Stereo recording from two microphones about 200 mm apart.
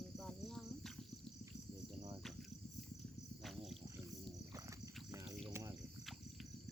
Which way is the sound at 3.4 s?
Centre (ahead or behind).